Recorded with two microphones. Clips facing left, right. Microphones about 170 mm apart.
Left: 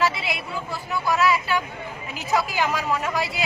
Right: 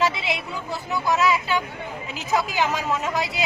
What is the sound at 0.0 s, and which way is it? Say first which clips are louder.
A man's voice: right 1 dB; 20° right (ahead or behind).